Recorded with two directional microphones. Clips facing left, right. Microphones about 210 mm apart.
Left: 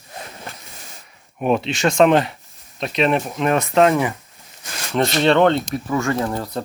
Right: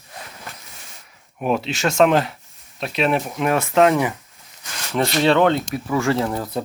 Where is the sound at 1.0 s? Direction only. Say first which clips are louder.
Left 2 dB; centre (ahead or behind).